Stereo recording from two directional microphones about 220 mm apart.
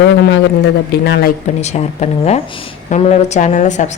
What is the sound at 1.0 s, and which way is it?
Speech, 45° left (ahead or behind).